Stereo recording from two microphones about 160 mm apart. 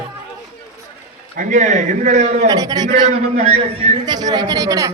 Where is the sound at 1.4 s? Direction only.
50° right (ahead or behind).